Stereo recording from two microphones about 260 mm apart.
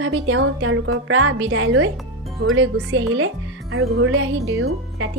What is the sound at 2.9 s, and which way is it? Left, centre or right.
A woman's voice, right.